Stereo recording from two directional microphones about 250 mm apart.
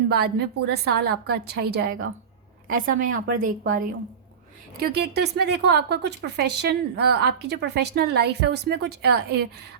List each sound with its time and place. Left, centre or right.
0.1 s speech: right